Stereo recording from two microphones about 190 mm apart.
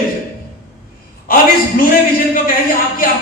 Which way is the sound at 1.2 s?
50° left (ahead or behind).